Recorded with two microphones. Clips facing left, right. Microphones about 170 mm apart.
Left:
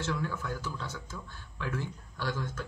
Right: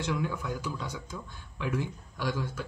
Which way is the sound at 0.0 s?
15° right (ahead or behind).